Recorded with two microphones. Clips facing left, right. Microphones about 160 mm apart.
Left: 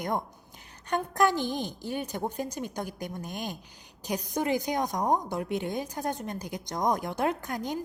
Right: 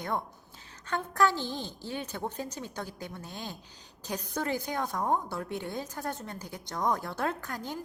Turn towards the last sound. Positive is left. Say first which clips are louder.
# left 5 dB
turn(degrees=15)  # may be behind; listen again after turning